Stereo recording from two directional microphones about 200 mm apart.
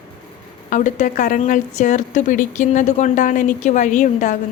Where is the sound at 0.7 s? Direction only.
40° left (ahead or behind).